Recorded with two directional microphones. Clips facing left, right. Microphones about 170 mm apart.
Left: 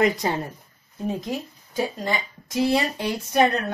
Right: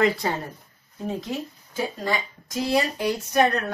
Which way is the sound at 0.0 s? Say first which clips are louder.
Left 1 dB; 15° left (ahead or behind).